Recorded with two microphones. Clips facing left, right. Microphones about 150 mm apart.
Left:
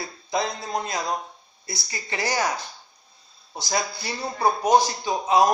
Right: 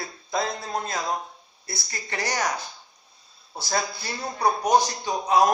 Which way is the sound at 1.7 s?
Centre (ahead or behind).